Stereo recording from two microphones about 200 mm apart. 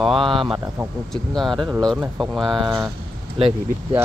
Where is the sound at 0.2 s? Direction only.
25° right (ahead or behind).